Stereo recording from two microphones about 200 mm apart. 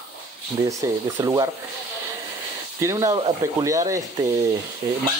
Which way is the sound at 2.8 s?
15° right (ahead or behind).